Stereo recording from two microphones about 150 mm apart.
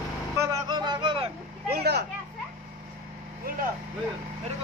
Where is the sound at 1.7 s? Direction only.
90° right.